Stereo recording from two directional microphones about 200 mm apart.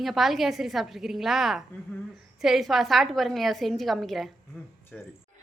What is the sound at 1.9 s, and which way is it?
Speech, 10° left (ahead or behind).